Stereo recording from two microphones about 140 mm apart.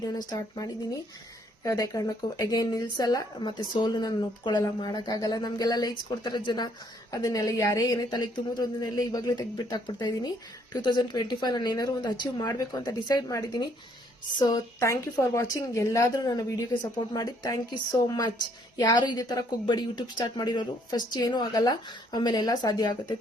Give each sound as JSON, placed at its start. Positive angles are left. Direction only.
{"t": 0.0, "sound": "a woman's voice", "side_deg": 30}